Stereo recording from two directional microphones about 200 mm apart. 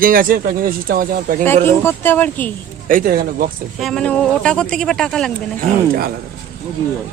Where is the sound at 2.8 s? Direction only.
45° right (ahead or behind).